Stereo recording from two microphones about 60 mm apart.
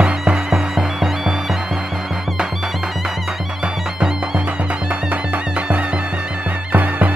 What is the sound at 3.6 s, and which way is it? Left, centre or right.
Music, centre.